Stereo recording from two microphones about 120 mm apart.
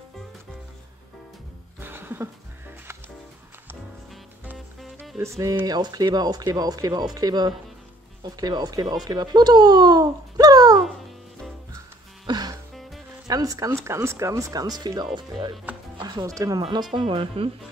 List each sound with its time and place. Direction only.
1.8 s music: 20° right (ahead or behind)
5.2 s speech: 25° right (ahead or behind)
12.3 s music: 35° right (ahead or behind)
13.3 s speech: 30° right (ahead or behind)
16.9 s speech: 45° right (ahead or behind)